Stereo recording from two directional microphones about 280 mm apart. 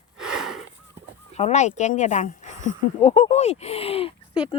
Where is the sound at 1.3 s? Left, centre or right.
Left.